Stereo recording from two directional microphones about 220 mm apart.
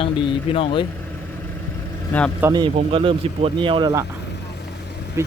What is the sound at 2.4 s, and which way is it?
Speech, 20° right (ahead or behind).